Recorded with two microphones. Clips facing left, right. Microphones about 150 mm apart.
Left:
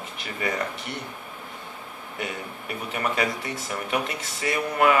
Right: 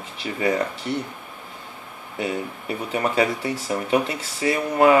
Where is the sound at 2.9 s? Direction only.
30° right (ahead or behind).